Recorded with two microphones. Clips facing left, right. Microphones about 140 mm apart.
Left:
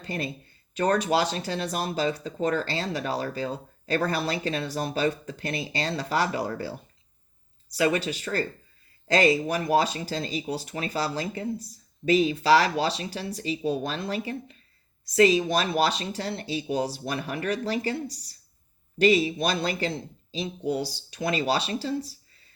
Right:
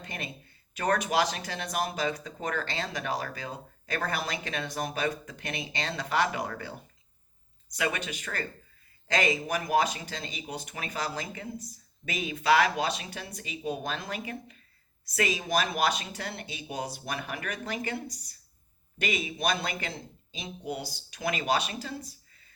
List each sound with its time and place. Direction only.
0.0 s speech: 30° left (ahead or behind)